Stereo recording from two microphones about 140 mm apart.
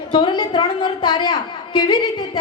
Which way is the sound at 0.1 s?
35° left (ahead or behind).